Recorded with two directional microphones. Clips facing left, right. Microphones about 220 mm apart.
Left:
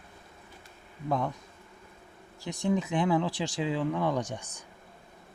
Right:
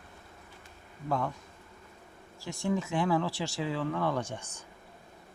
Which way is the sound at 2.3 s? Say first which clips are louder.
Left 3 dB; 20° left (ahead or behind).